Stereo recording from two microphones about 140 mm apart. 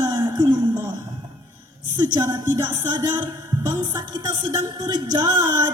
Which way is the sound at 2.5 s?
20° right (ahead or behind).